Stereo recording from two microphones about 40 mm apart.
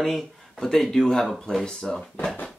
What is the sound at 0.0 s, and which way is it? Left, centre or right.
Speech, centre.